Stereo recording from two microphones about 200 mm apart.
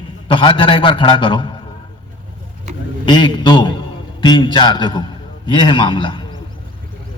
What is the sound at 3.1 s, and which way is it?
A man's voice, 25° left (ahead or behind).